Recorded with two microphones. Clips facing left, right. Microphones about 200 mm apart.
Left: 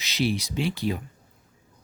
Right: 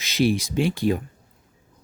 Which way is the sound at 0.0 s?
50° right (ahead or behind).